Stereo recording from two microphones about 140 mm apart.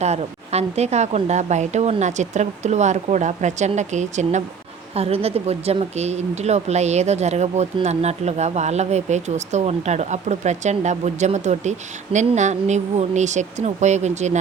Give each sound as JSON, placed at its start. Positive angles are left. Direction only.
{"t": 0.0, "sound": "speech", "side_deg": -50}